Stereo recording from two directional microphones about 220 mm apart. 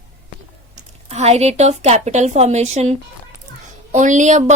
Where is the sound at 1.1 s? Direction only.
30° right (ahead or behind).